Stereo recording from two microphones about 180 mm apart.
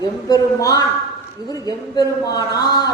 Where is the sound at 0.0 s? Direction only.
20° left (ahead or behind).